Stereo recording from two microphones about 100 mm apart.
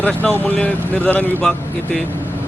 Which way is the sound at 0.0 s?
15° left (ahead or behind).